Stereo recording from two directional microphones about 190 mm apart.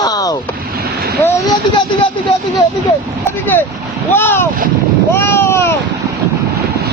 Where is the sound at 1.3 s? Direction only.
15° left (ahead or behind).